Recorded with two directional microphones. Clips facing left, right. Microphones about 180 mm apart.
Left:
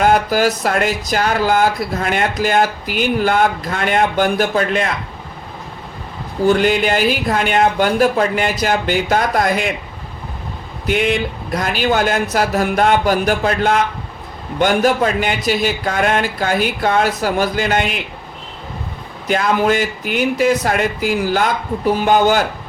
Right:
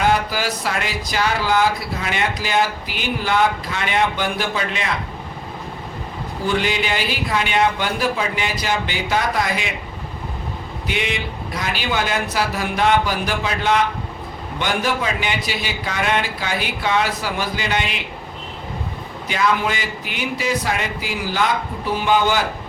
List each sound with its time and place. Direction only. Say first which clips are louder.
0.0 s speech: left 6 dB; 50° left (ahead or behind)
6.4 s speech: left 8 dB; 45° left (ahead or behind)
10.8 s speech: left 8 dB; 50° left (ahead or behind)
19.3 s speech: left 5 dB; 50° left (ahead or behind)